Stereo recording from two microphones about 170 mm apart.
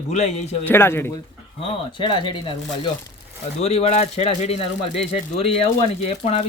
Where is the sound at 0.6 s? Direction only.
15° left (ahead or behind).